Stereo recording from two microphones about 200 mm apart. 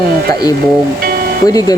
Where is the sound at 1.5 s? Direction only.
20° left (ahead or behind).